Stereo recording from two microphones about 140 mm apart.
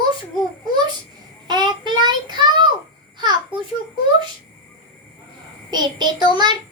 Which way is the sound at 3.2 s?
30° right (ahead or behind).